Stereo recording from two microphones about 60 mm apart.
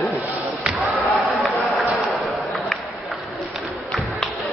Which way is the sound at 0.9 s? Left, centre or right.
Left.